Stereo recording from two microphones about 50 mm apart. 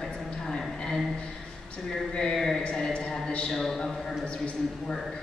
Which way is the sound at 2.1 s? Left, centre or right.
Centre.